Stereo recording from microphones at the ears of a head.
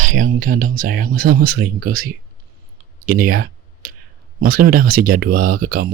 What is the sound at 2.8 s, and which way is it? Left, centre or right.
Speech, right.